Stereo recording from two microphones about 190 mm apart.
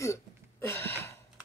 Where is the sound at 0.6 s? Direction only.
15° left (ahead or behind).